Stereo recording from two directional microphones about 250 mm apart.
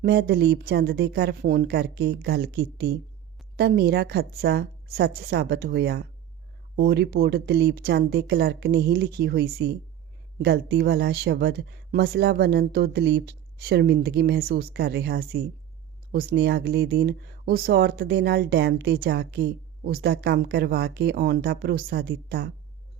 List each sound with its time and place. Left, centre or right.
0.0 s speech: right